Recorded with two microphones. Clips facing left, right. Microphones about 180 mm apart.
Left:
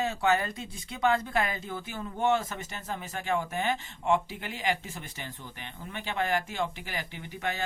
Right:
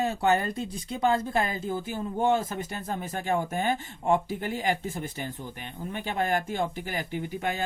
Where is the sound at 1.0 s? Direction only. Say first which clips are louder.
Right 1 dB; 35° right (ahead or behind).